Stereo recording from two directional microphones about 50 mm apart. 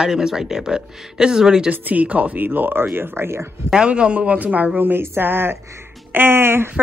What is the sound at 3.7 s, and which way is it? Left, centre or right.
Speech, centre.